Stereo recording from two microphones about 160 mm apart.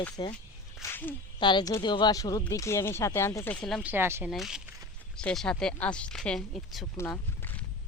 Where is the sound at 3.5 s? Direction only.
5° left (ahead or behind).